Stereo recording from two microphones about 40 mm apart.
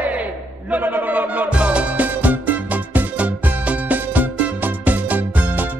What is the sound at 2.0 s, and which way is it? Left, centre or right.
Music, right.